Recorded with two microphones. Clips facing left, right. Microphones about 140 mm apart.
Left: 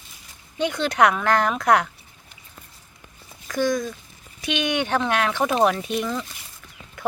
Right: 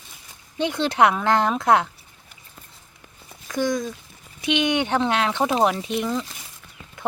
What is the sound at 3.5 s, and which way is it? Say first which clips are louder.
Speech: left 1 dB; 20° right (ahead or behind).